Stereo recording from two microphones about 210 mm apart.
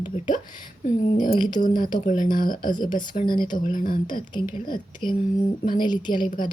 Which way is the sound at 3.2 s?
20° left (ahead or behind).